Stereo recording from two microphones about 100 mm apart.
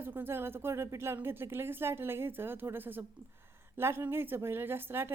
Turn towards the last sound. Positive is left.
turn(degrees=-20)  # may be behind; listen again after turning